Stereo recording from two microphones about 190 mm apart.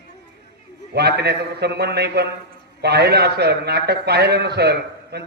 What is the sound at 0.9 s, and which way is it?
A man's voice, 60° right (ahead or behind).